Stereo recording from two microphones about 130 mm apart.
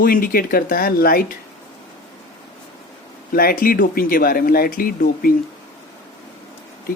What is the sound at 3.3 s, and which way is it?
Speech, 90° left.